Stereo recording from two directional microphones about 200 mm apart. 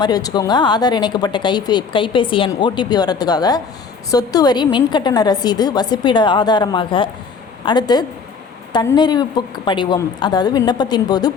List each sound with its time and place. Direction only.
0.0 s speech: 20° left (ahead or behind)